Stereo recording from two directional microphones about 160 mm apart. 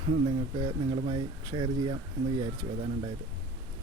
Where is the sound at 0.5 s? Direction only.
30° right (ahead or behind).